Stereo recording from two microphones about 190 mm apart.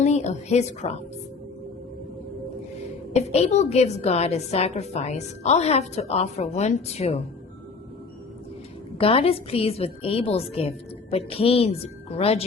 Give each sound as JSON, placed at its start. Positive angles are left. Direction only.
{"t": 0.0, "sound": "a woman's voice", "side_deg": 35}
{"t": 3.1, "sound": "a woman's voice", "side_deg": 35}
{"t": 9.0, "sound": "a woman's voice", "side_deg": 30}